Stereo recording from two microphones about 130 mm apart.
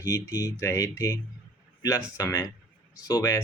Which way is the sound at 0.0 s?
30° left (ahead or behind).